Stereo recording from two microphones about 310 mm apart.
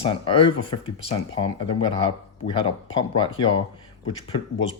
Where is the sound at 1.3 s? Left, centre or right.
Centre.